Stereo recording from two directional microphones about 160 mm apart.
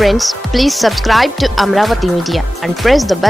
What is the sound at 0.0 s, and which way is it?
Speech, centre (ahead or behind).